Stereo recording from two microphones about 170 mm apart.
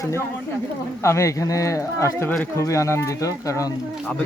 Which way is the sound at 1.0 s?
15° left (ahead or behind).